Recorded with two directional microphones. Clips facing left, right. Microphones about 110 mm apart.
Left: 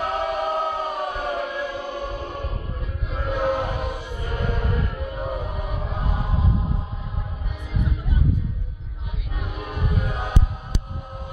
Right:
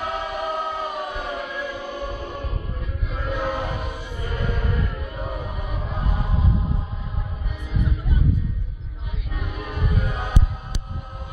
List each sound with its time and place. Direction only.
0.0 s choir: 45° left (ahead or behind)
1.6 s music: 25° left (ahead or behind)
3.2 s a sound: 20° left (ahead or behind)
9.3 s music: 15° left (ahead or behind)